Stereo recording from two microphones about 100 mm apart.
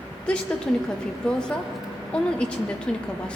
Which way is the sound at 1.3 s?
10° left (ahead or behind).